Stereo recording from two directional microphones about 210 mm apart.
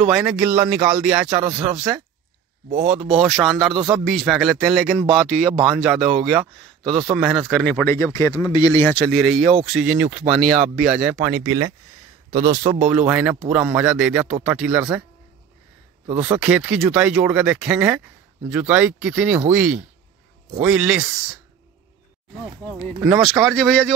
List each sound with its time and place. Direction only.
0.0 s a man's voice: 5° right (ahead or behind)
16.2 s speech: 5° right (ahead or behind)
23.2 s speech: centre (ahead or behind)